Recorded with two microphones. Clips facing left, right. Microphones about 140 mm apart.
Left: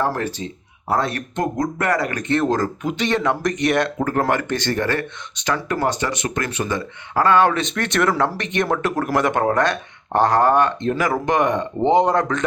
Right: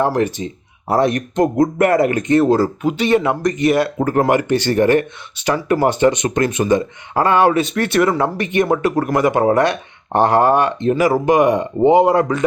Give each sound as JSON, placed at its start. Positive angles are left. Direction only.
{"t": 0.0, "sound": "speech", "side_deg": -15}
{"t": 2.3, "sound": "speech", "side_deg": -10}